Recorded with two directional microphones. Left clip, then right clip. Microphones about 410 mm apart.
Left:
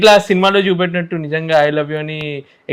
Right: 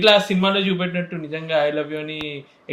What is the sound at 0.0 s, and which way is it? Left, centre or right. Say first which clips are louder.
Speech: left 6 dB; left.